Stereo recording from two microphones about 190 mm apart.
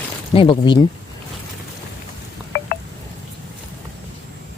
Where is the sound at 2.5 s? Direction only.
50° left (ahead or behind).